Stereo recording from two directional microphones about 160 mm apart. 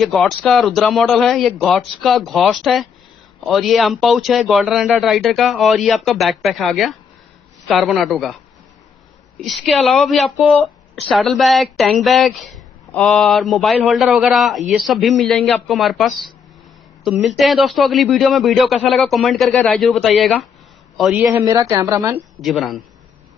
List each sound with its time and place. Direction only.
0.0 s speech: centre (ahead or behind)
9.4 s speech: centre (ahead or behind)
21.5 s speech: 20° right (ahead or behind)
22.4 s speech: centre (ahead or behind)